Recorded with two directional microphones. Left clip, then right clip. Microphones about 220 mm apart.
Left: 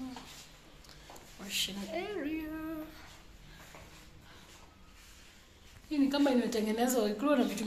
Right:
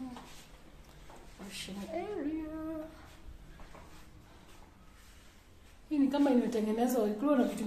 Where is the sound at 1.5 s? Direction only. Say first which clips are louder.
Left 5 dB; 5° right (ahead or behind).